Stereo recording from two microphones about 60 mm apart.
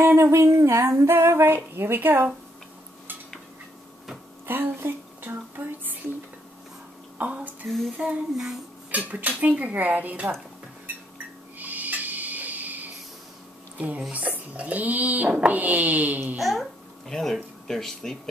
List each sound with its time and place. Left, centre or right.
0.0 s female singing: right
4.5 s speech: right
7.2 s speech: right
11.5 s a sound: right
13.7 s speech: right
16.3 s speech: centre